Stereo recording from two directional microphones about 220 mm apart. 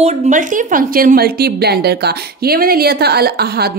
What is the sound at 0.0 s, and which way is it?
A woman's voice, 30° right (ahead or behind).